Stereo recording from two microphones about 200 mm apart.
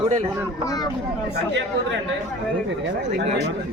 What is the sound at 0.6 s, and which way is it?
Speech, 15° left (ahead or behind).